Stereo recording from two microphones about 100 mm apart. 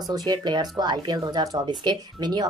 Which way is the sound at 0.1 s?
40° right (ahead or behind).